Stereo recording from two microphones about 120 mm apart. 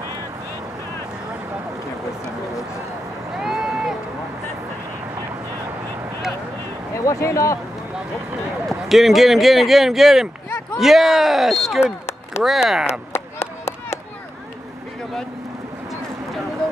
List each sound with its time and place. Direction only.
3.4 s run: 5° right (ahead or behind)
7.1 s speech: 25° left (ahead or behind)
8.6 s speech: centre (ahead or behind)
11.8 s a sound: 20° left (ahead or behind)
12.4 s speech: centre (ahead or behind)
13.1 s a sound: 20° left (ahead or behind)